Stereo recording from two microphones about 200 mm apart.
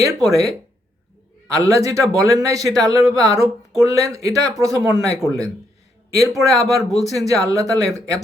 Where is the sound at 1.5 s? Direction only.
15° right (ahead or behind).